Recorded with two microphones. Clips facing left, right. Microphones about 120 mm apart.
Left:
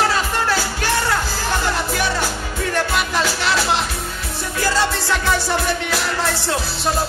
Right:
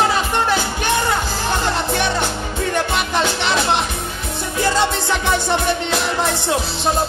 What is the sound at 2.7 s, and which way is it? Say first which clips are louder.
Music: even; 25° right (ahead or behind).